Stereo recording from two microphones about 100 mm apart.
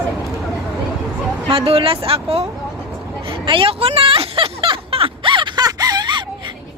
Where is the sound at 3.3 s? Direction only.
60° right (ahead or behind).